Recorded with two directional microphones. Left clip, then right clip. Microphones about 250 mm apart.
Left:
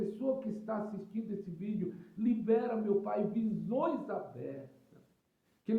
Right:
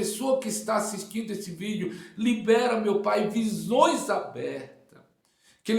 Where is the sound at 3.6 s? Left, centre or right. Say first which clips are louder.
Right 14 dB; centre.